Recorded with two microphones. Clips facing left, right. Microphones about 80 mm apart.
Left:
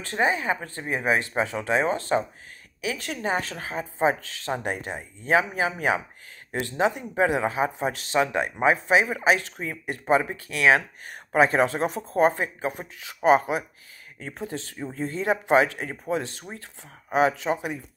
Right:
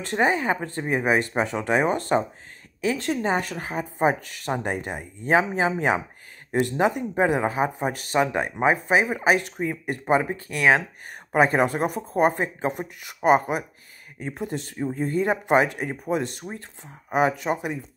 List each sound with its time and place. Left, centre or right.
0.6 s speech: right
11.5 s speech: centre